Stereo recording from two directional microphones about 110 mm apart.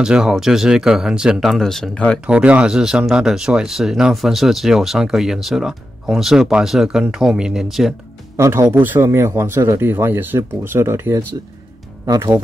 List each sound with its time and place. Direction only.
0.0 s speech: 5° right (ahead or behind)
2.2 s speech: 10° right (ahead or behind)
8.4 s a man's voice: 25° right (ahead or behind)